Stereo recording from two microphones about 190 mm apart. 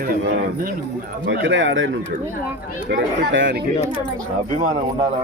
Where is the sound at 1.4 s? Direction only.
70° right (ahead or behind).